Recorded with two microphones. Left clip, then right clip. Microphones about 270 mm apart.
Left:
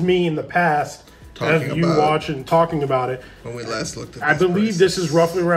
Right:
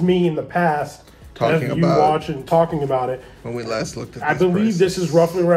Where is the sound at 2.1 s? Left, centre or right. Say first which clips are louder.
Even; left.